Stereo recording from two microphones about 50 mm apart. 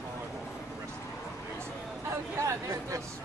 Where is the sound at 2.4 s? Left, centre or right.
Right.